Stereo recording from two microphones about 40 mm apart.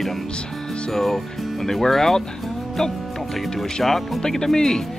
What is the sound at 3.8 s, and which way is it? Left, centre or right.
Speech, centre.